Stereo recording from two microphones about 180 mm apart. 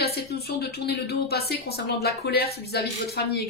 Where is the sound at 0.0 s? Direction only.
60° left (ahead or behind).